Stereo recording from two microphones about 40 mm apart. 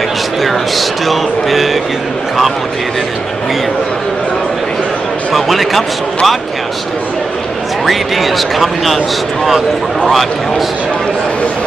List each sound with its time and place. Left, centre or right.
0.4 s a sound: centre
5.3 s speech: centre
7.8 s speech: centre